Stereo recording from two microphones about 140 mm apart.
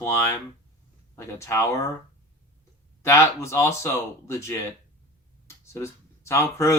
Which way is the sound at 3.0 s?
20° left (ahead or behind).